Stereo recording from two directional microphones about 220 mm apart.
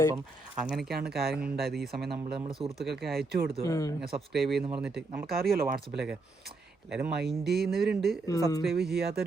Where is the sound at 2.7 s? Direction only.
Centre (ahead or behind).